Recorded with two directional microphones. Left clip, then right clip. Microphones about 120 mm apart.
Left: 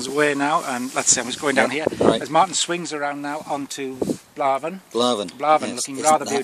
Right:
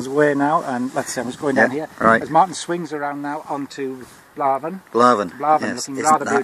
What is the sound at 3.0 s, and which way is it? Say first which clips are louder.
Speech: right 1 dB; 30° left (ahead or behind).